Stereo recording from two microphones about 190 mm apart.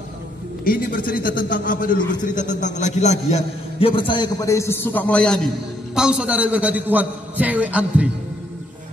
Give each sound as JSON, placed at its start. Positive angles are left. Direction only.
{"t": 0.7, "sound": "a man's voice", "side_deg": 50}